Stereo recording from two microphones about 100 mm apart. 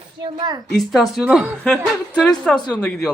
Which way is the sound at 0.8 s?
Centre (ahead or behind).